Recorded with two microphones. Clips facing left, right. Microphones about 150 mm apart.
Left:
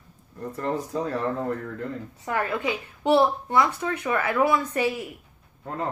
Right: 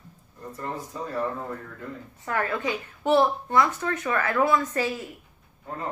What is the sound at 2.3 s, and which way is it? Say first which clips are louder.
A woman's voice: left 1 dB; 15° left (ahead or behind).